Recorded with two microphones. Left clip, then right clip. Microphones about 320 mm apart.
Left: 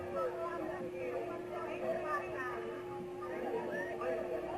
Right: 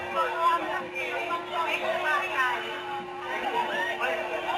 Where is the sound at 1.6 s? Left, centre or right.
Centre.